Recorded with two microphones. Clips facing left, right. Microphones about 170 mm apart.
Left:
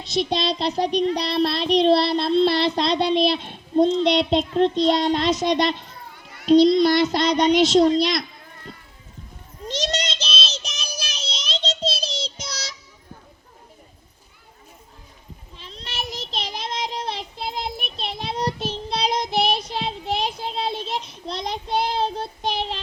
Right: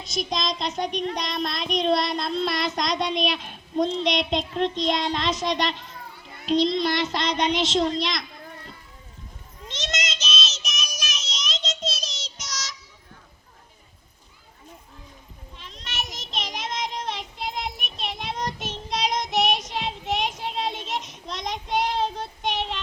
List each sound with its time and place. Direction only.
0.0 s child singing: 35° left (ahead or behind)
9.6 s child singing: 35° left (ahead or behind)
15.5 s child singing: 30° left (ahead or behind)